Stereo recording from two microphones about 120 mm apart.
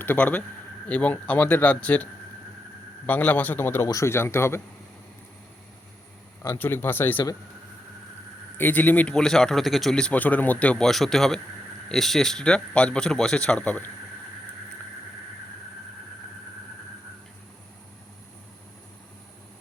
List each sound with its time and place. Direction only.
0.0 s a man's voice: 15° left (ahead or behind)
3.1 s a man's voice: 15° left (ahead or behind)
6.6 s a man's voice: 15° left (ahead or behind)
8.5 s a man's voice: 15° left (ahead or behind)